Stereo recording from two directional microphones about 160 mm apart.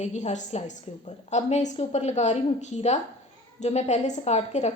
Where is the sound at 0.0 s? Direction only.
45° left (ahead or behind).